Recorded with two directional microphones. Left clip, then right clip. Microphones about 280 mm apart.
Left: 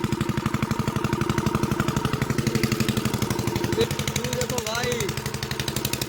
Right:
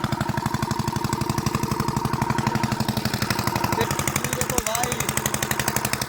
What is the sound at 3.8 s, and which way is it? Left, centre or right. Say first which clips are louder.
Jackhammer: right 3 dB; centre.